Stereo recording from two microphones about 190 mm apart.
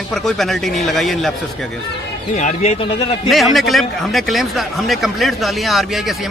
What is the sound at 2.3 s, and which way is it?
Speech, 35° left (ahead or behind).